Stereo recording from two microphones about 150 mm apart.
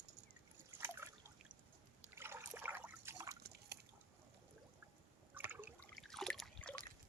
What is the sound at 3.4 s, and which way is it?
Liquid, 90° right.